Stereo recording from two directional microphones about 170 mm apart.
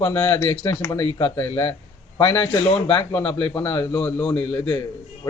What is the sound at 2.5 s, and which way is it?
Speech, 35° left (ahead or behind).